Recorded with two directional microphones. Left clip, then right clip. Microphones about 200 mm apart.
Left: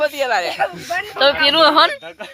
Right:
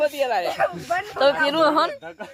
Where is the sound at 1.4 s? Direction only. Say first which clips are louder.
Left 7 dB; centre (ahead or behind).